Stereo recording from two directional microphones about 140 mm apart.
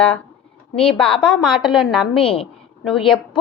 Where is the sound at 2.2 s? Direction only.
40° left (ahead or behind).